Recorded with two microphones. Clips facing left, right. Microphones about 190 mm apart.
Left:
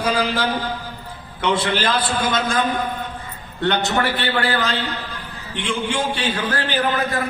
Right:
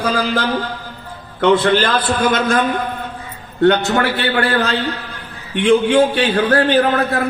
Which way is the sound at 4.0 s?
60° right (ahead or behind).